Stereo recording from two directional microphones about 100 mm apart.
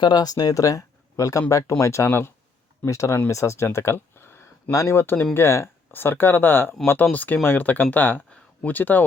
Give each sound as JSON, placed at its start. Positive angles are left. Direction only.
{"t": 0.0, "sound": "speech", "side_deg": 45}